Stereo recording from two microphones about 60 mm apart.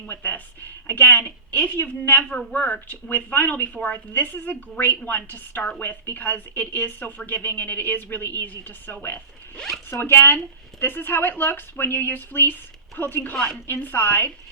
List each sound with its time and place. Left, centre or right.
0.1 s a woman's voice: left
13.3 s a woman's voice: centre
13.7 s speech: left